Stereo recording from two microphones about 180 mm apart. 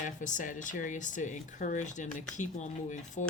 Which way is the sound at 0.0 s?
45° left (ahead or behind).